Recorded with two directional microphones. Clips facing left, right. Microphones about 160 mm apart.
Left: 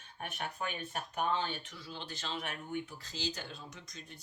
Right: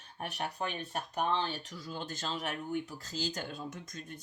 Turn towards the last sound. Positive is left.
turn(degrees=-50)  # may be behind; listen again after turning